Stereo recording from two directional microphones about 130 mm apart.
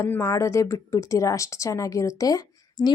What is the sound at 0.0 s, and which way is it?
A woman's voice, 20° left (ahead or behind).